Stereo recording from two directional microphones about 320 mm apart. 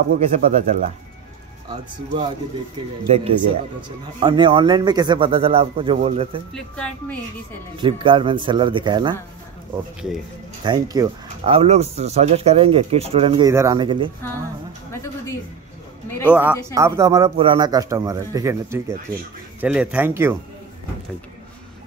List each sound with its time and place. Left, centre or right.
0.3 s speech: right
3.1 s speech: centre
6.5 s speech: centre
7.7 s speech: centre
10.6 s speech: centre
16.1 s speech: centre
16.7 s speech: centre